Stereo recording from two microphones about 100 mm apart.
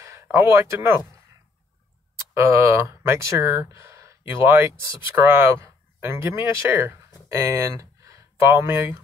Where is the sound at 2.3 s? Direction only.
30° right (ahead or behind).